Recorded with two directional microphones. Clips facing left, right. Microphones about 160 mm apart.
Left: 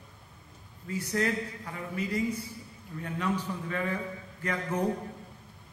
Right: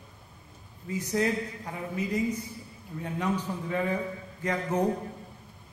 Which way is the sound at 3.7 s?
20° right (ahead or behind).